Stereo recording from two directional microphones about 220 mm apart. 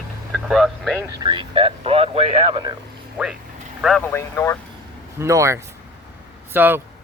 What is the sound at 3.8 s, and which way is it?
Speech, centre (ahead or behind).